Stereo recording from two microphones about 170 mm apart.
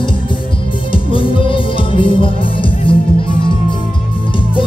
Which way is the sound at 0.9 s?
30° left (ahead or behind).